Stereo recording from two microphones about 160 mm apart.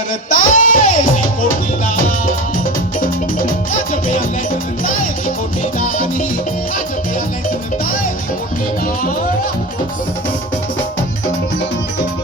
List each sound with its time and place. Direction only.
0.3 s music: 55° left (ahead or behind)
3.0 s music: 55° left (ahead or behind)
5.8 s music: 55° left (ahead or behind)